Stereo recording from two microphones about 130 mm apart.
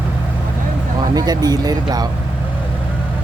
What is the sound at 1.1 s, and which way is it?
Speech, 30° right (ahead or behind).